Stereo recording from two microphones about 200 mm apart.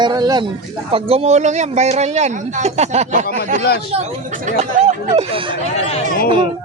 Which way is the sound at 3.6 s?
55° left (ahead or behind).